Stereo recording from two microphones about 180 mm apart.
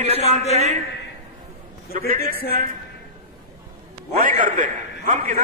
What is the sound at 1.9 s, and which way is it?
Speech, 45° right (ahead or behind).